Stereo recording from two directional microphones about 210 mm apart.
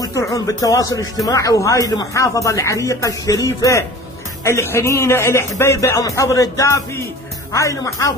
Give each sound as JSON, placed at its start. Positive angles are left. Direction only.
{"t": 0.0, "sound": "speech", "side_deg": 15}